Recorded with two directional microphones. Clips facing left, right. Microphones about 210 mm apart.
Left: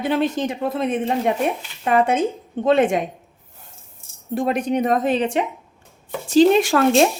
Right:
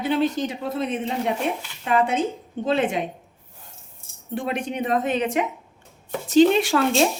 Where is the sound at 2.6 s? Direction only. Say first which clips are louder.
Left 6 dB; 45° left (ahead or behind).